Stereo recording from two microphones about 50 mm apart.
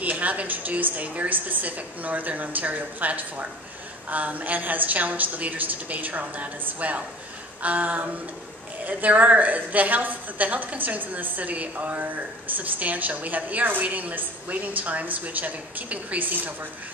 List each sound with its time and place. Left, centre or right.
0.0 s a woman's voice: right